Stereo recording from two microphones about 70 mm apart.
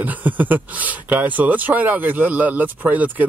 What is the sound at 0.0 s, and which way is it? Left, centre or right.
Speech, right.